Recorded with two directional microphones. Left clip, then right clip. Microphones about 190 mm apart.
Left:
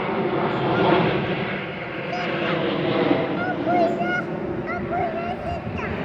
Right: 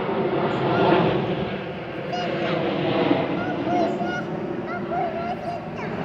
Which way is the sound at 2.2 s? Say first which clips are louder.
Left 1 dB; 30° left (ahead or behind).